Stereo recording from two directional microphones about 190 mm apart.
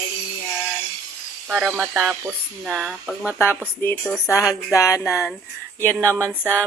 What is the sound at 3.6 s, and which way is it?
Speech, 10° left (ahead or behind).